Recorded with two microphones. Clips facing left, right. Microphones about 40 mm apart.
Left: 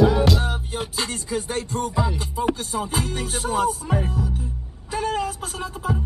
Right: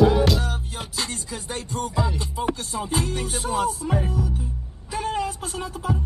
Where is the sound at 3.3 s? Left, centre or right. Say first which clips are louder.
Left 2 dB; left.